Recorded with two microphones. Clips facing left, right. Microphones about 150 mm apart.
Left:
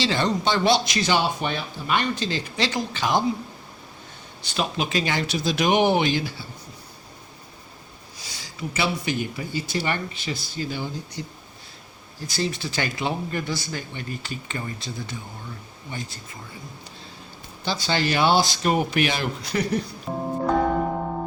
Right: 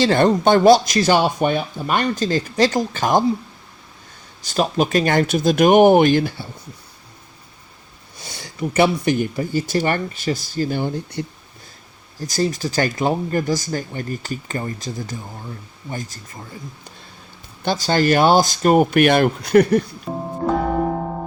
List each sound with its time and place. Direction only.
0.0 s speech: 55° right (ahead or behind)
4.4 s speech: 45° right (ahead or behind)
8.2 s speech: 55° right (ahead or behind)
12.2 s speech: 40° right (ahead or behind)
17.7 s speech: 45° right (ahead or behind)
20.1 s speech: centre (ahead or behind)